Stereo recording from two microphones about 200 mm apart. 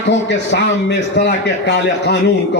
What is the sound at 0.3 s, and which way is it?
A man's voice, 60° left (ahead or behind).